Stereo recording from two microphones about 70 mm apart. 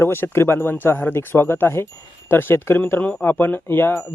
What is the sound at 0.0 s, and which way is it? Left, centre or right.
Speech, left.